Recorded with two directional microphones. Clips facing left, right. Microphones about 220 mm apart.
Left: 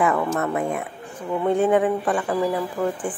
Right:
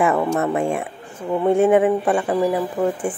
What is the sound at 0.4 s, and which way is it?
Speech, 25° right (ahead or behind).